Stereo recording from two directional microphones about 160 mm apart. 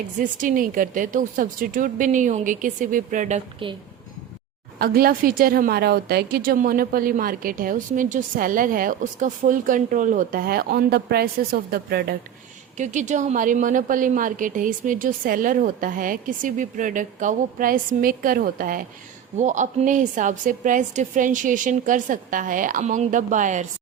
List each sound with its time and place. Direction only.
0.2 s a woman's voice: 55° right (ahead or behind)
4.8 s a woman's voice: 70° right (ahead or behind)
12.7 s a woman's voice: 50° right (ahead or behind)
19.4 s a woman's voice: 50° right (ahead or behind)